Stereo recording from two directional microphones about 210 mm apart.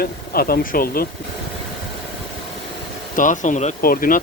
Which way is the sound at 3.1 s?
35° left (ahead or behind).